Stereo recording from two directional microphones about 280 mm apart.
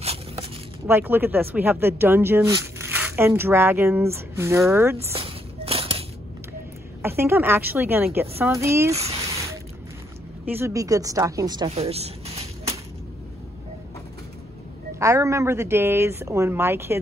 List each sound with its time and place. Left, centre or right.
0.0 s a sound: right
0.8 s speech: centre
5.1 s a sound: centre
7.0 s speech: centre
10.4 s a woman's voice: centre
15.0 s speech: centre